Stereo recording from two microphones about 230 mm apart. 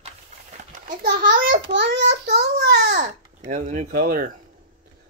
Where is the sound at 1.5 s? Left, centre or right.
Right.